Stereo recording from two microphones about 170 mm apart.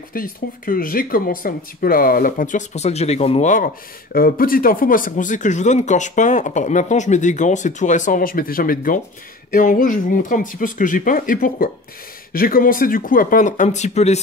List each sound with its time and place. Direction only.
0.1 s speech: 55° left (ahead or behind); by 14.2 s 40° left (ahead or behind)